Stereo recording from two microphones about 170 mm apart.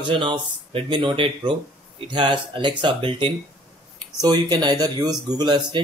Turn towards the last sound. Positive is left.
turn(degrees=-25)  # may be behind; listen again after turning